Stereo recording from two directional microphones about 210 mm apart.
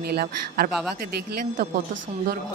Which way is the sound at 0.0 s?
50° right (ahead or behind).